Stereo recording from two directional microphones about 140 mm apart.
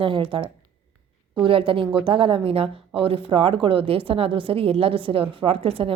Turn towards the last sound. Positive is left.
turn(degrees=-40)  # may be behind; listen again after turning